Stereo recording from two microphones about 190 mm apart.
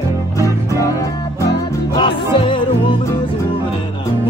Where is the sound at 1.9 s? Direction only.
25° left (ahead or behind).